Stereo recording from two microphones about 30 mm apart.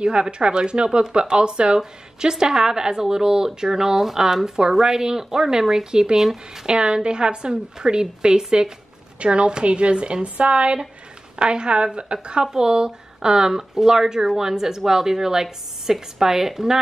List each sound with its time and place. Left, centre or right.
0.0 s a woman's voice: right; by 6.6 s centre
6.6 s a woman's voice: right
9.2 s a woman's voice: right
10.2 s a woman's voice: right
12.4 s a woman's voice: right